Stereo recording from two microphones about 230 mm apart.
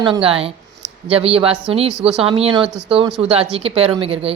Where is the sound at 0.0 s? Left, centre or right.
Right.